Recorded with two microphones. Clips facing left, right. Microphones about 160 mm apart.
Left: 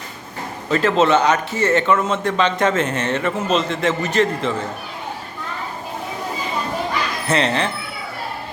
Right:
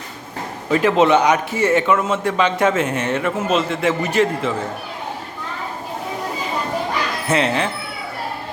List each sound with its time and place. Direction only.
0.7 s a man's voice: 15° right (ahead or behind)
7.3 s a man's voice: 10° right (ahead or behind)